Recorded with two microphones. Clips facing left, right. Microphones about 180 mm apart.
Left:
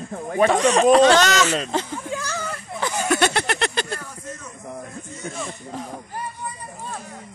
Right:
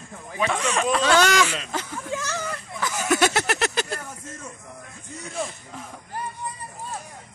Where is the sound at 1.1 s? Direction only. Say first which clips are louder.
Left 2 dB; 10° right (ahead or behind).